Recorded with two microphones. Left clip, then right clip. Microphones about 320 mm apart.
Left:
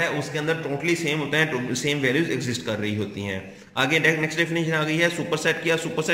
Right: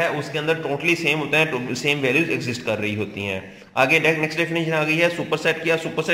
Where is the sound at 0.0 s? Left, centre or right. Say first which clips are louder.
Right 3 dB; centre.